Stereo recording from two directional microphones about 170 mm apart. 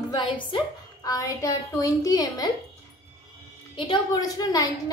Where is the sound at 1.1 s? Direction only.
20° left (ahead or behind).